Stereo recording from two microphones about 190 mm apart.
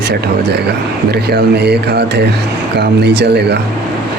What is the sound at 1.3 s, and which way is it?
Speech, 60° right (ahead or behind).